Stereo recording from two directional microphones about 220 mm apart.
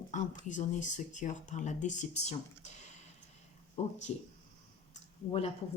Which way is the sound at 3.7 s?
30° left (ahead or behind).